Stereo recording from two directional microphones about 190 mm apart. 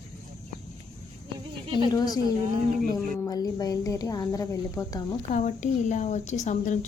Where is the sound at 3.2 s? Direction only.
20° left (ahead or behind).